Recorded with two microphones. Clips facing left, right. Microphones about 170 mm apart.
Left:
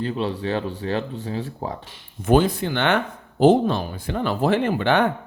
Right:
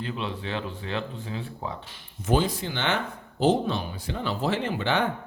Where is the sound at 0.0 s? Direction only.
35° left (ahead or behind).